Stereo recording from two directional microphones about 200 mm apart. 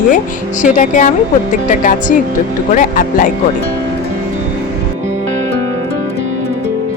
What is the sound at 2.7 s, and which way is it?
Speech, 40° left (ahead or behind).